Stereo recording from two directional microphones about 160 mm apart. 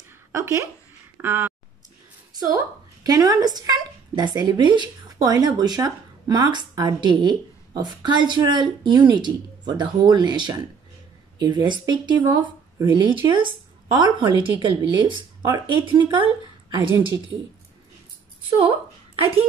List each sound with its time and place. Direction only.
0.3 s speech: 15° right (ahead or behind)